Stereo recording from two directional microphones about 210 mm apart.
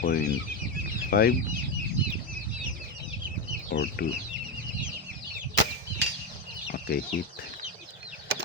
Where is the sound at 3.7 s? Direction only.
45° left (ahead or behind).